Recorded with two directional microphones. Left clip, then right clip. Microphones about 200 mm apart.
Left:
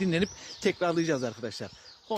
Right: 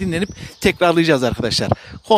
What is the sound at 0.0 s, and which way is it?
Speech, 30° right (ahead or behind).